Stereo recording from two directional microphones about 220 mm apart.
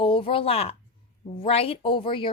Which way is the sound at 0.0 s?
25° left (ahead or behind).